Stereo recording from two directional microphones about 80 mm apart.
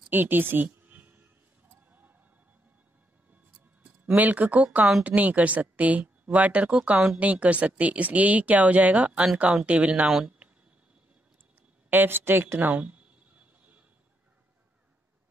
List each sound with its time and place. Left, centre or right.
0.1 s a sound: right
1.9 s tick-tock: right
3.8 s speech: right
11.9 s speech: right